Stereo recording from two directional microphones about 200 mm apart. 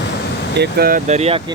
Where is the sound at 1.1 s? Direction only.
30° right (ahead or behind).